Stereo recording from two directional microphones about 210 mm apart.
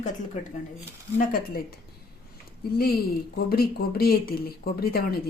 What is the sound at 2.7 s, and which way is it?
A woman's voice, 45° left (ahead or behind).